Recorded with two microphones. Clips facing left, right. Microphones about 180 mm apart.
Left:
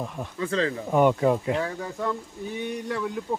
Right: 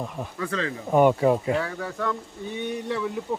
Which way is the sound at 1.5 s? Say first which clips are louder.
Right 1 dB; 20° left (ahead or behind).